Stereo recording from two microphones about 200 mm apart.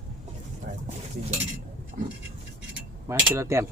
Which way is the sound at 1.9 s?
40° right (ahead or behind).